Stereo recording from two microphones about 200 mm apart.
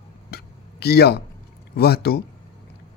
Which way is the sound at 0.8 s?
55° left (ahead or behind).